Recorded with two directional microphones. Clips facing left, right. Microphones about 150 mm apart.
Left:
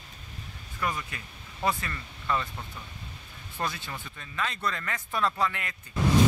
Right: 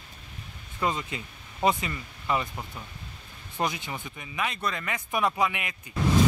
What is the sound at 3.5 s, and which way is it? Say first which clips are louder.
Speech: right 4 dB; 15° right (ahead or behind).